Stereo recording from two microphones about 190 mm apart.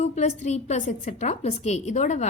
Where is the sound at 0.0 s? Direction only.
40° left (ahead or behind).